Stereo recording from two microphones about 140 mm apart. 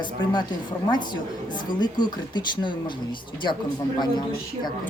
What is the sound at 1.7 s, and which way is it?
Speech, 30° left (ahead or behind).